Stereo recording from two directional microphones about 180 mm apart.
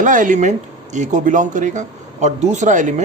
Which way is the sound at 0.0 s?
45° right (ahead or behind).